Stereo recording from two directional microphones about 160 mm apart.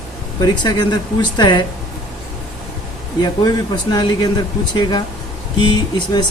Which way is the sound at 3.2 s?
25° left (ahead or behind).